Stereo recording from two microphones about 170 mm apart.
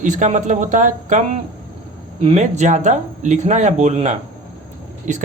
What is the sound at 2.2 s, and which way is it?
A man's voice, 40° right (ahead or behind).